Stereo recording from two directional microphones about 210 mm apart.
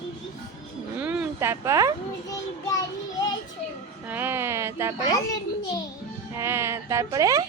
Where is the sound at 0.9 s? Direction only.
5° right (ahead or behind).